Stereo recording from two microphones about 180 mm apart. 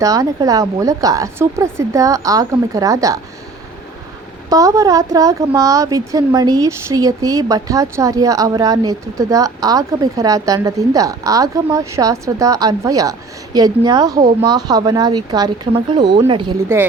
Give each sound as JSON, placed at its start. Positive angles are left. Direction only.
{"t": 0.0, "sound": "a woman's voice", "side_deg": -20}
{"t": 4.4, "sound": "a woman's voice", "side_deg": -20}